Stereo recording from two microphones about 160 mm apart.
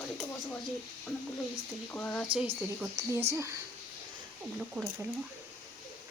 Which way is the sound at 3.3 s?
15° right (ahead or behind).